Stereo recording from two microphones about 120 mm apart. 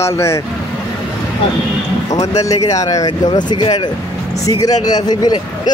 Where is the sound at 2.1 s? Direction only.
30° left (ahead or behind).